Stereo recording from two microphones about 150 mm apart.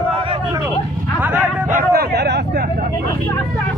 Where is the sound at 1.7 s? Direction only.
90° right.